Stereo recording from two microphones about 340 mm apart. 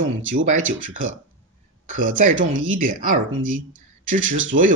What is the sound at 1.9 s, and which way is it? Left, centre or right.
Speech, right.